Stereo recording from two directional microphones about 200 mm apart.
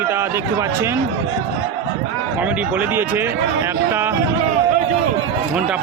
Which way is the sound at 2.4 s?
10° right (ahead or behind).